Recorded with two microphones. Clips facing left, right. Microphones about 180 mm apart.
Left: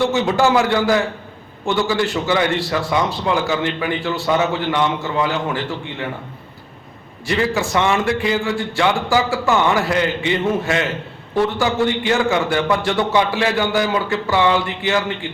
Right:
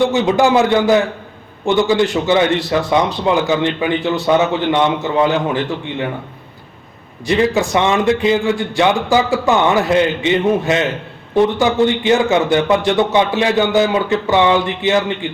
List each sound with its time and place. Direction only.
0.0 s a man's voice: 20° right (ahead or behind)
7.3 s a man's voice: 20° right (ahead or behind)